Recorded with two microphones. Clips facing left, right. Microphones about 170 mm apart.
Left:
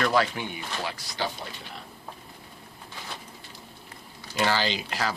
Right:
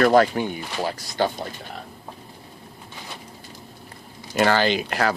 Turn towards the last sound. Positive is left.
turn(degrees=-55)  # may be behind; listen again after turning